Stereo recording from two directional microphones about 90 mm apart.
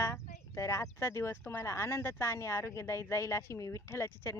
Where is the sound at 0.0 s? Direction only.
35° left (ahead or behind).